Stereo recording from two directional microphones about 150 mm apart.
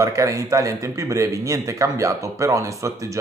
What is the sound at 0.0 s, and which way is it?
Speech, 20° right (ahead or behind).